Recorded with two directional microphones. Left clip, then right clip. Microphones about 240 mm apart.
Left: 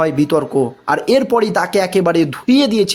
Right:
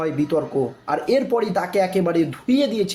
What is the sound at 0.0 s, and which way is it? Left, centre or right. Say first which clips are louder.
A man's voice: left 7 dB; left.